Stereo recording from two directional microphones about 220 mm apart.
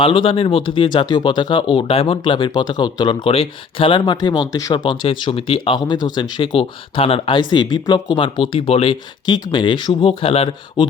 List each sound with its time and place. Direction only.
0.0 s speech: 20° left (ahead or behind)